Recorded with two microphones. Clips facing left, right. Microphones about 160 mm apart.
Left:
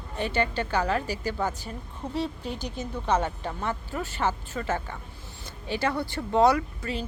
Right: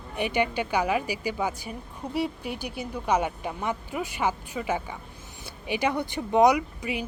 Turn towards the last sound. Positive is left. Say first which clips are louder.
# right 1 dB
turn(degrees=-15)  # may be behind; listen again after turning